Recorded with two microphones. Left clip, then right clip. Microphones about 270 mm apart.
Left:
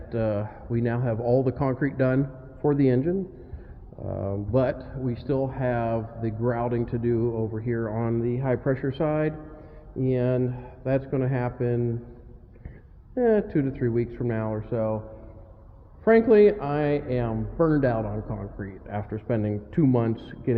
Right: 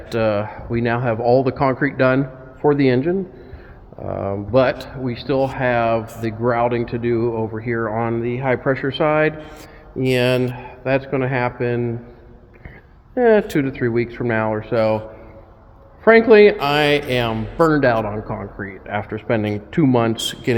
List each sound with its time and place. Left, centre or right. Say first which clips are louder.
0.1 s speech: right 9 dB; centre
13.1 s speech: right 8 dB; centre
16.0 s speech: right 7 dB; centre